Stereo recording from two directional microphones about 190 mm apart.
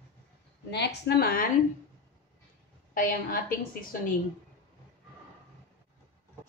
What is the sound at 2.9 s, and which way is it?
A woman's voice, 50° left (ahead or behind).